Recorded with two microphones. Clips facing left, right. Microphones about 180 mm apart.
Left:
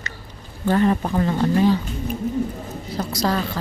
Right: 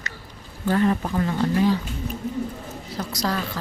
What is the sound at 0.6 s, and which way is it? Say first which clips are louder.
Speech: left 2 dB; 30° left (ahead or behind).